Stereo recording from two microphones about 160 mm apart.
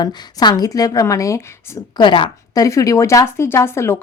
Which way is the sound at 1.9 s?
30° left (ahead or behind).